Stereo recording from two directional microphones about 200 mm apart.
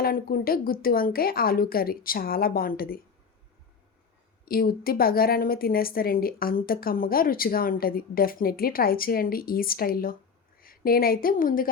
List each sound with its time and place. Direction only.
0.0 s a woman's voice: 45° left (ahead or behind)
4.4 s a woman's voice: 50° left (ahead or behind)